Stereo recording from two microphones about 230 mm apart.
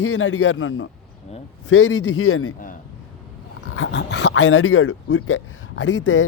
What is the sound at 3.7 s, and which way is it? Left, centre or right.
Speech, left.